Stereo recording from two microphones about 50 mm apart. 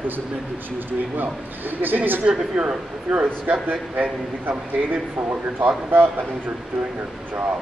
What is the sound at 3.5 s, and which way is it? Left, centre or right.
Speech, right.